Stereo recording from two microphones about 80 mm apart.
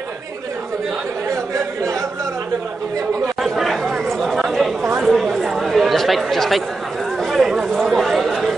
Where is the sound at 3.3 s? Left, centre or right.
Centre.